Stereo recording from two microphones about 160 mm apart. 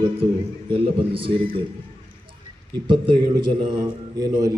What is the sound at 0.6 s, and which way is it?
Speech, 35° right (ahead or behind).